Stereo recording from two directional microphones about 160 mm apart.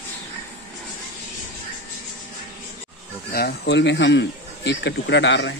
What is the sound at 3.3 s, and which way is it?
Speech, 75° left (ahead or behind).